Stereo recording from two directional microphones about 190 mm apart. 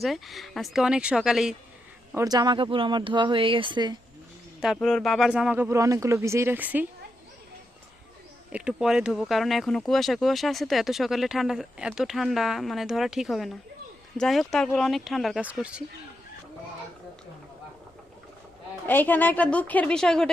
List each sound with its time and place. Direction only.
0.0 s speech: centre (ahead or behind)
2.1 s speech: 20° right (ahead or behind)
4.6 s speech: centre (ahead or behind)
8.5 s speech: 5° right (ahead or behind)
18.9 s a woman's voice: 10° left (ahead or behind)